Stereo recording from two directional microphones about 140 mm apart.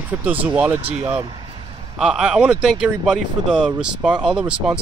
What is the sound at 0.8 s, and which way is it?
Speech, 45° right (ahead or behind).